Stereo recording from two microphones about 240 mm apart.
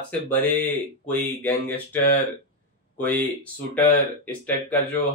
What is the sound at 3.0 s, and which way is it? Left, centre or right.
Speech, centre.